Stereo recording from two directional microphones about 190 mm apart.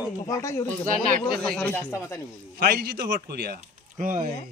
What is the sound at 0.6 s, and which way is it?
Speech, 45° right (ahead or behind).